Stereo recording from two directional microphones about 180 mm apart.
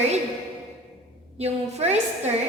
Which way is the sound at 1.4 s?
35° right (ahead or behind).